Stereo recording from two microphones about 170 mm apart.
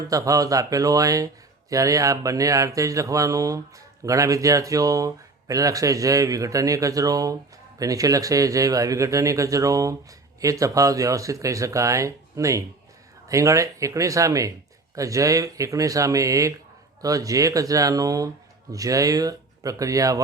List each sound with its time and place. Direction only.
0.1 s speech: 20° right (ahead or behind)